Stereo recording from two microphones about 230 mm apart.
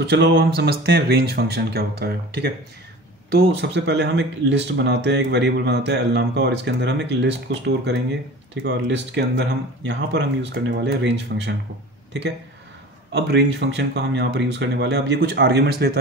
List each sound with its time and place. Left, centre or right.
0.0 s speech: right
13.1 s speech: right